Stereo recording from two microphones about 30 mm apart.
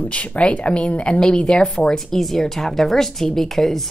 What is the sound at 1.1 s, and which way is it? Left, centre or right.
Speech, left.